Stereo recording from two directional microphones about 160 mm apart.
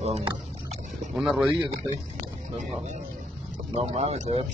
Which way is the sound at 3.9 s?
45° right (ahead or behind).